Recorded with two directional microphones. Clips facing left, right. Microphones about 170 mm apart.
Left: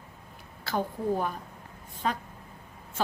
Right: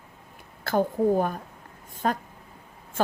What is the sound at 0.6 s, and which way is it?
A woman's voice, 50° right (ahead or behind).